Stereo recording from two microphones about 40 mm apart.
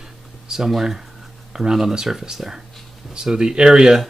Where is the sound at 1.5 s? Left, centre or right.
Centre.